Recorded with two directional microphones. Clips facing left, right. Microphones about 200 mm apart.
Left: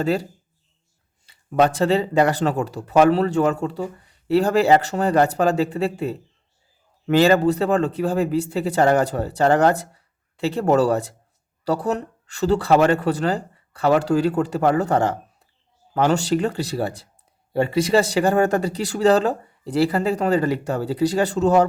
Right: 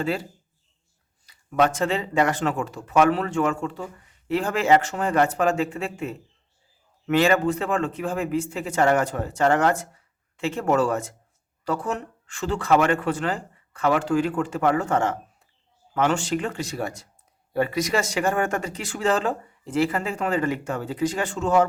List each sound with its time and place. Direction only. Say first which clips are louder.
0.0 s speech: left 5 dB; 40° left (ahead or behind)
1.3 s speech: left 3 dB; 30° left (ahead or behind)